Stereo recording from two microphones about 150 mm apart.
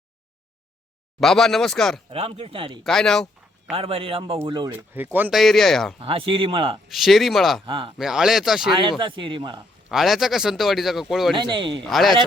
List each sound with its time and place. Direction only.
1.2 s speech: 5° left (ahead or behind)
2.0 s speech: 40° right (ahead or behind)
2.8 s speech: 5° left (ahead or behind)
3.8 s speech: 40° right (ahead or behind)
4.9 s speech: 10° right (ahead or behind)
5.3 s speech: centre (ahead or behind)
6.0 s speech: 35° right (ahead or behind)
6.8 s speech: centre (ahead or behind)
7.6 s speech: 35° right (ahead or behind)
7.9 s speech: 5° right (ahead or behind)
8.7 s speech: 30° right (ahead or behind)
9.9 s speech: centre (ahead or behind)
11.3 s speech: 30° right (ahead or behind)
11.8 s speech: centre (ahead or behind)